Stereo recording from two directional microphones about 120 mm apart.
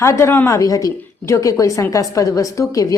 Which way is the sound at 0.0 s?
25° left (ahead or behind).